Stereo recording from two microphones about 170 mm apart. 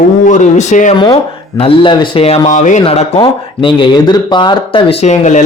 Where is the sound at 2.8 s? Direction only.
35° left (ahead or behind).